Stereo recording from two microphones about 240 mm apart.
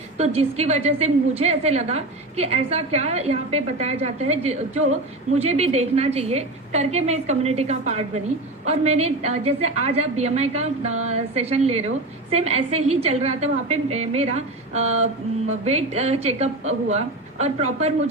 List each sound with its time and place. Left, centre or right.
0.2 s a woman's voice: right